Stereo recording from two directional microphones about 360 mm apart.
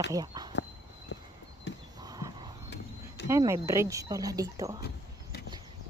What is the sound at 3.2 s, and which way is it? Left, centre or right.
Speech, centre.